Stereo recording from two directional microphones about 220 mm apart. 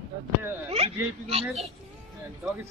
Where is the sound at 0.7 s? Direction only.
25° right (ahead or behind).